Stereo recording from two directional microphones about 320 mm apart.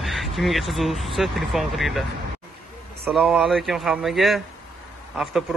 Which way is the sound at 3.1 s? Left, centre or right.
Centre.